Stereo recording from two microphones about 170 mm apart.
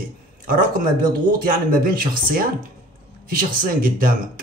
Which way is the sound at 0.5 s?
55° right (ahead or behind).